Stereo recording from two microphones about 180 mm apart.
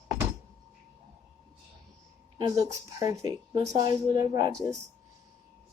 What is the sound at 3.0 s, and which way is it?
Speech, 20° right (ahead or behind).